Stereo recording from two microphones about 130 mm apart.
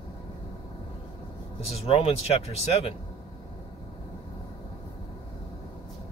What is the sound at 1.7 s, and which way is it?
Speech, 55° left (ahead or behind).